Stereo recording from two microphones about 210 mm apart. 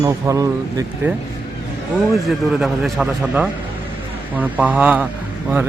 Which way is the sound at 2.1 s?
Centre (ahead or behind).